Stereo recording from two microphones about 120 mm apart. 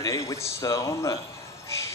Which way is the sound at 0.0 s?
25° left (ahead or behind).